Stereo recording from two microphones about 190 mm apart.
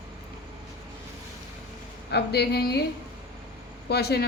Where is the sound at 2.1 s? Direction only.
60° left (ahead or behind).